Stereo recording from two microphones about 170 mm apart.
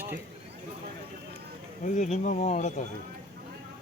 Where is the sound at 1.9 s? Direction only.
45° left (ahead or behind).